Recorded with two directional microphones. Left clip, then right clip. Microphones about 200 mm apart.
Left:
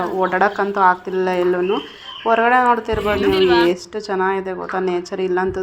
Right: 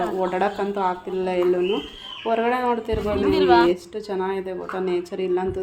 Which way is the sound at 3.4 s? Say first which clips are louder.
Even; 60° right (ahead or behind).